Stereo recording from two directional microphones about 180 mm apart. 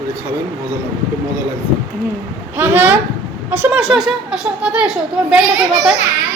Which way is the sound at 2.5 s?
10° right (ahead or behind).